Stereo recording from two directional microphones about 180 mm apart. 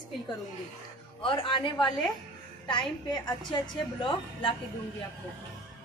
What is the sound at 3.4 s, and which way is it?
A woman's voice, 25° left (ahead or behind).